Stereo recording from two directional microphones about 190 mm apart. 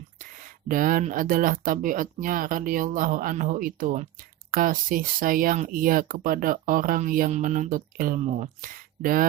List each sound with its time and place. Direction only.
0.7 s speech: 45° right (ahead or behind)